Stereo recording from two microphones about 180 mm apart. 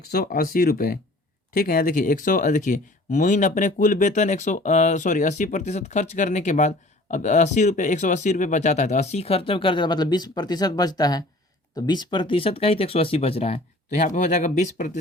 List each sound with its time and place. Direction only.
0.1 s speech: 60° left (ahead or behind)